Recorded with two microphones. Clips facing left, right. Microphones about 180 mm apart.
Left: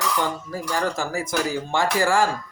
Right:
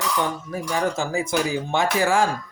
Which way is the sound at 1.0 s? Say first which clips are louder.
Right 2 dB; 25° right (ahead or behind).